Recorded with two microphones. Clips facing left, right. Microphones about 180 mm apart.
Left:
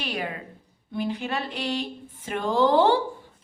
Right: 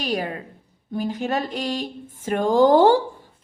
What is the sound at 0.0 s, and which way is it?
A woman's voice, 40° right (ahead or behind).